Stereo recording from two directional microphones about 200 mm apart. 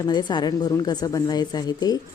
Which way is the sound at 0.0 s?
20° left (ahead or behind).